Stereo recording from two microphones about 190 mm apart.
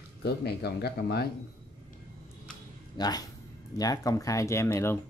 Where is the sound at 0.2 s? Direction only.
60° left (ahead or behind).